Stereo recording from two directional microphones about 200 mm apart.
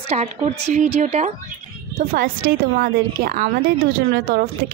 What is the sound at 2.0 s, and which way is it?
Speech, 45° right (ahead or behind).